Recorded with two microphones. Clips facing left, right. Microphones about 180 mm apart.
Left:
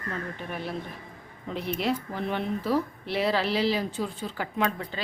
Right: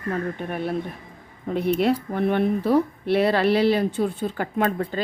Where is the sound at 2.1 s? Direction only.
60° right (ahead or behind).